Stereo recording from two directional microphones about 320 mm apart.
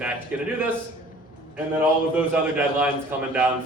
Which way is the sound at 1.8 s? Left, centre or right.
Centre.